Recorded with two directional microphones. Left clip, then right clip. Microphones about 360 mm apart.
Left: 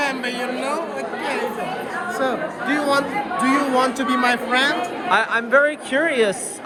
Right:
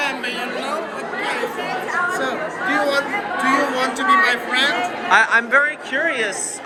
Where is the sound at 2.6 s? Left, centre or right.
Left.